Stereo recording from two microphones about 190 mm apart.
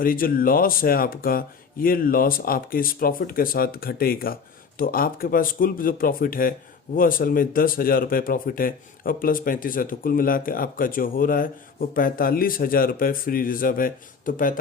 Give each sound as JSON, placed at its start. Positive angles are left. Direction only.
{"t": 0.0, "sound": "speech", "side_deg": 50}